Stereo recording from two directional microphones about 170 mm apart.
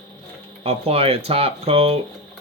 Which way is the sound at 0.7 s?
35° right (ahead or behind).